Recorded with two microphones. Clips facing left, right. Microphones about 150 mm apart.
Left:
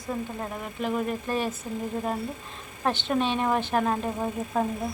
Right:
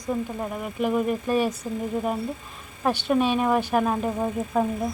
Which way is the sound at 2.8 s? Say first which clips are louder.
Right 4 dB; 10° right (ahead or behind).